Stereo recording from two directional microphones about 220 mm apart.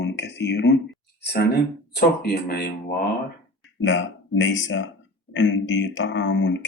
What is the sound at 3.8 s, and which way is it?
Speech, 55° left (ahead or behind).